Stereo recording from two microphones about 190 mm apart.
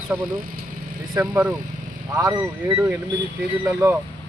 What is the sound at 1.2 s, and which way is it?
Speech, 10° right (ahead or behind).